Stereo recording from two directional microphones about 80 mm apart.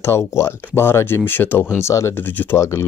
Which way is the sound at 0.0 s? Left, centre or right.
Left.